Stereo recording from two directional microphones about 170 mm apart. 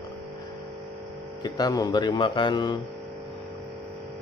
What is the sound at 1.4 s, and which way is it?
Mantra, 25° left (ahead or behind).